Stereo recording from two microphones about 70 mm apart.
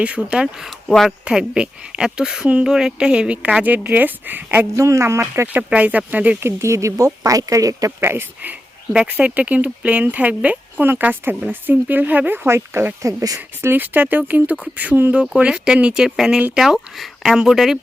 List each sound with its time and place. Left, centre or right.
0.3 s speech: centre
0.9 s speech: centre
1.2 s speech: centre
4.8 s speech: right
5.7 s speech: centre
6.4 s speech: right
9.0 s speech: centre; by 13.4 s right
13.6 s speech: right
15.4 s speech: centre